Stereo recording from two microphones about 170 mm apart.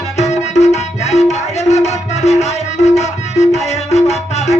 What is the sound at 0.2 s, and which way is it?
Music, 40° left (ahead or behind).